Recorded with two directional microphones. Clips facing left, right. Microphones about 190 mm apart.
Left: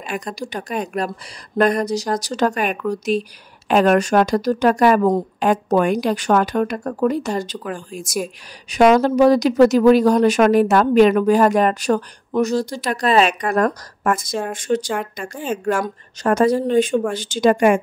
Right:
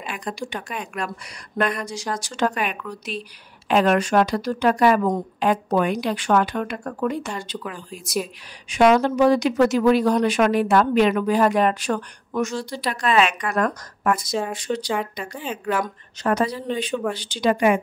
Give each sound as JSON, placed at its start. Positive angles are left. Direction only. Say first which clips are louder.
{"t": 0.0, "sound": "a woman's voice", "louder": "left 3 dB", "side_deg": 40}